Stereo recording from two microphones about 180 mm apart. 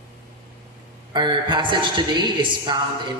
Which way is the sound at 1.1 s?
25° right (ahead or behind).